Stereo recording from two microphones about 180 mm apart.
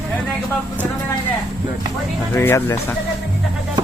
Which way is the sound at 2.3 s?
15° left (ahead or behind).